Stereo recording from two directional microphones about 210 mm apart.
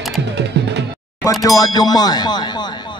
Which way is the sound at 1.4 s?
15° left (ahead or behind).